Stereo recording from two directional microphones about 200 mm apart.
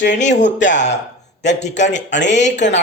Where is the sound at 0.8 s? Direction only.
35° left (ahead or behind).